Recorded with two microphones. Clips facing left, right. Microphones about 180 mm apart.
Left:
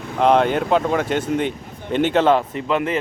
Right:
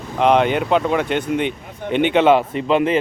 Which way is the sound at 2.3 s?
20° right (ahead or behind).